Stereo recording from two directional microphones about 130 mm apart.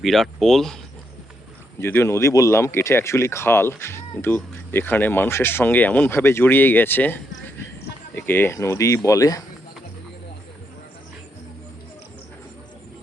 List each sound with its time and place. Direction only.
0.0 s speech: centre (ahead or behind)
1.8 s speech: 20° left (ahead or behind)